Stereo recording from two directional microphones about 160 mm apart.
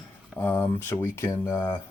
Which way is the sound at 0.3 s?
10° left (ahead or behind).